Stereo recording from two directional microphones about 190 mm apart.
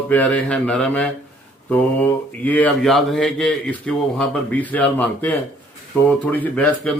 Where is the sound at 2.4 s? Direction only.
10° left (ahead or behind).